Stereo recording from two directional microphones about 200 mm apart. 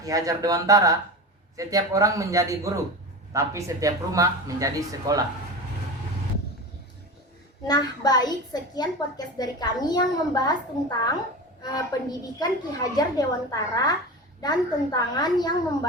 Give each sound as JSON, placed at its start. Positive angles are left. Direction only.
{"t": 0.0, "sound": "speech", "side_deg": -15}
{"t": 7.7, "sound": "a child's voice", "side_deg": 20}